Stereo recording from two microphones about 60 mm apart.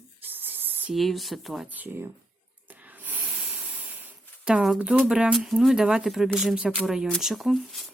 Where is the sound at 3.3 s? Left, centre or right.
Centre.